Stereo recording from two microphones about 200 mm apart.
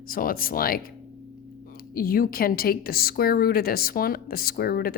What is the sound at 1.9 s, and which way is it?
A woman's voice, 45° left (ahead or behind).